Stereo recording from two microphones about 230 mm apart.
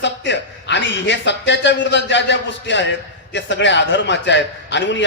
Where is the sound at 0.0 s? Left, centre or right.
Left.